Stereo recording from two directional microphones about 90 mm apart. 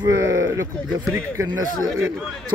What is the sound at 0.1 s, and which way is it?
Speech, 35° right (ahead or behind).